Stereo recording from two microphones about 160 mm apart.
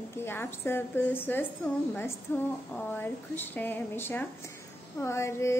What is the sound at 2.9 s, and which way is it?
A woman's voice, 10° left (ahead or behind).